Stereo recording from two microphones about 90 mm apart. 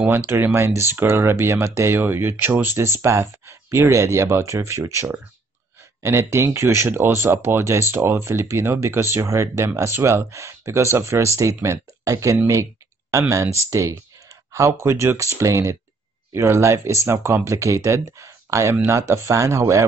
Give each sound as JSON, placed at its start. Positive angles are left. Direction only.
{"t": 0.1, "sound": "speech", "side_deg": -25}